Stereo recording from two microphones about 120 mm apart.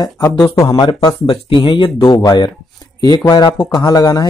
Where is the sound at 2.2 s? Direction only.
35° left (ahead or behind).